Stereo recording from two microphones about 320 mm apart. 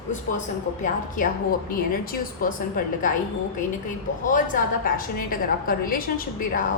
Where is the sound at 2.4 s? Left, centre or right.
Left.